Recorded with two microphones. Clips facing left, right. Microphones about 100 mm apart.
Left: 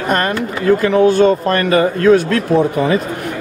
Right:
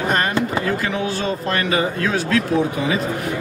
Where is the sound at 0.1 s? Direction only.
45° left (ahead or behind).